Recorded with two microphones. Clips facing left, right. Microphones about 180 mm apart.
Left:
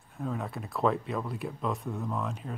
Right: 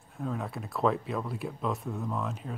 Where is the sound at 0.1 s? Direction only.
Centre (ahead or behind).